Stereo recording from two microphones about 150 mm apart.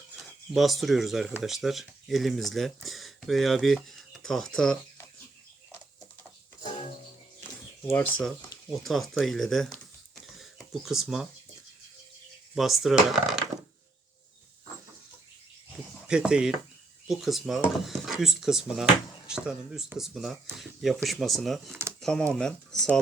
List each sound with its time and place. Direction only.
0.2 s speech: centre (ahead or behind)
6.6 s music: 50° left (ahead or behind)
7.9 s speech: 10° left (ahead or behind)
10.3 s a sound: centre (ahead or behind)
12.5 s speech: centre (ahead or behind)
16.0 s speech: 5° right (ahead or behind)